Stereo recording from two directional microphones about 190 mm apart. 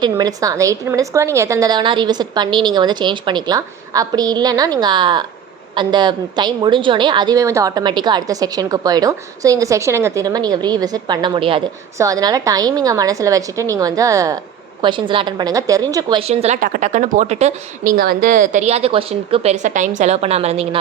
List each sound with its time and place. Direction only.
0.0 s a woman's voice: 20° right (ahead or behind)
16.2 s a woman's voice: 35° right (ahead or behind)
17.9 s a woman's voice: 50° right (ahead or behind); by 20.7 s 35° right (ahead or behind)